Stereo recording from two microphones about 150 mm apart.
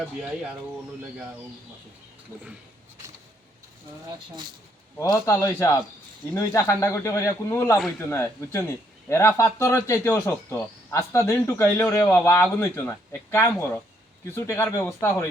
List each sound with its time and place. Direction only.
4.9 s speech: 20° left (ahead or behind)